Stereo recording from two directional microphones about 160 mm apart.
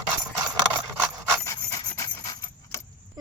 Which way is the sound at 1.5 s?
20° left (ahead or behind).